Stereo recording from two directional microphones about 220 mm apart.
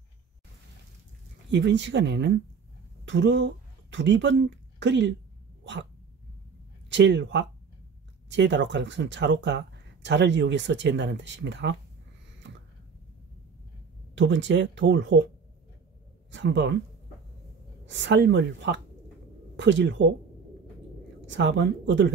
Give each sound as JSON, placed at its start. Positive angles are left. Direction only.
{"t": 1.5, "sound": "speech", "side_deg": -55}
{"t": 5.6, "sound": "dog", "side_deg": -55}
{"t": 6.9, "sound": "speech", "side_deg": -55}
{"t": 14.1, "sound": "speech", "side_deg": -55}
{"t": 16.3, "sound": "speech", "side_deg": -55}
{"t": 17.8, "sound": "speech", "side_deg": -55}
{"t": 21.3, "sound": "speech", "side_deg": -55}